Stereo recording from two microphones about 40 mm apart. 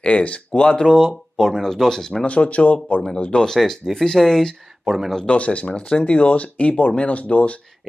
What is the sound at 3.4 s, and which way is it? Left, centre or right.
Speech, centre.